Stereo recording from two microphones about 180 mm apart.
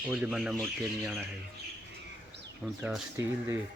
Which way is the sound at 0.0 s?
5° right (ahead or behind).